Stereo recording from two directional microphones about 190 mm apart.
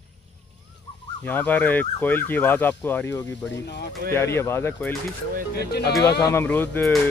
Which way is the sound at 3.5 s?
60° left (ahead or behind).